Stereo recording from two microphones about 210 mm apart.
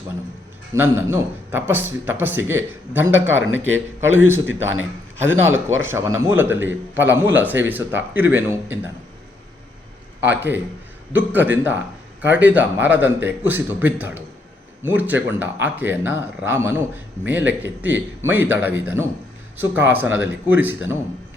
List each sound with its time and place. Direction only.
0.7 s a man's voice: 10° right (ahead or behind)
3.3 s a man's voice: 70° right (ahead or behind)
5.5 s a man's voice: 10° right (ahead or behind)
10.2 s a man's voice: 10° right (ahead or behind)